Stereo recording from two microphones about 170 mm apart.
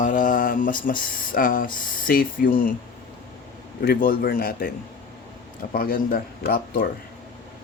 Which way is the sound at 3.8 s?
60° left (ahead or behind).